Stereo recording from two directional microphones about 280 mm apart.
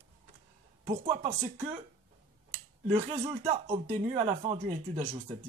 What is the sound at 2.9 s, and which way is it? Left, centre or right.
Speech, centre.